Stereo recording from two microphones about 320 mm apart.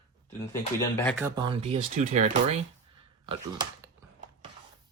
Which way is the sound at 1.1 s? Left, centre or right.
Centre.